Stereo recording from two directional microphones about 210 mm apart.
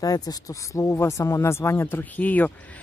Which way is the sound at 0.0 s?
15° left (ahead or behind).